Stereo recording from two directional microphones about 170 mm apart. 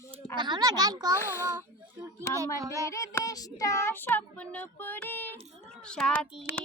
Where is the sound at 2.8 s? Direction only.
20° left (ahead or behind).